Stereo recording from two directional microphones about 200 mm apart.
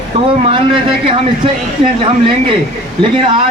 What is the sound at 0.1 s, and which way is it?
Speech, 30° right (ahead or behind).